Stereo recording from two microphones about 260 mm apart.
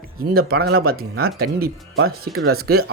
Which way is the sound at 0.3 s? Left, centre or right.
Right.